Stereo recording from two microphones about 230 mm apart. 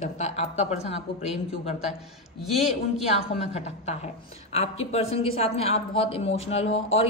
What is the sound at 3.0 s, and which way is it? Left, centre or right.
A woman's voice, left.